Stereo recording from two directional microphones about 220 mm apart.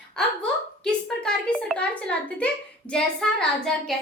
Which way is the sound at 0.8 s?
5° left (ahead or behind).